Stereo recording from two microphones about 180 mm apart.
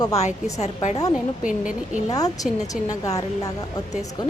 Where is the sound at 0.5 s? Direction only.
40° left (ahead or behind).